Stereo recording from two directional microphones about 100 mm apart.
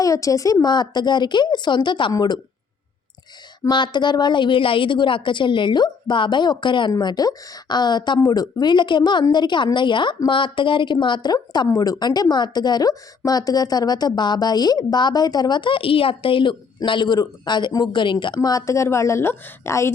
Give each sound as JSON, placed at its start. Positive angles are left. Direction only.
{"t": 0.0, "sound": "a woman's voice", "side_deg": 35}
{"t": 3.7, "sound": "a woman's voice", "side_deg": 50}
{"t": 18.3, "sound": "a woman's voice", "side_deg": 35}